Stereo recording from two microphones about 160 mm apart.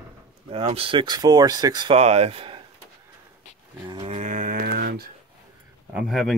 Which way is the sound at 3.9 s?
35° right (ahead or behind).